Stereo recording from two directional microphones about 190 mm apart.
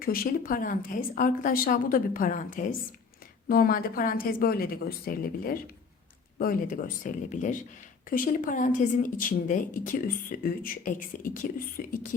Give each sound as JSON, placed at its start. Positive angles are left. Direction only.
{"t": 0.0, "sound": "speech", "side_deg": 50}